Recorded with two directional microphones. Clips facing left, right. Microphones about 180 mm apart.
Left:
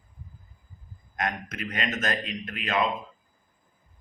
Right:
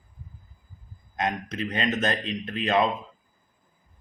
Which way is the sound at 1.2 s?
25° right (ahead or behind).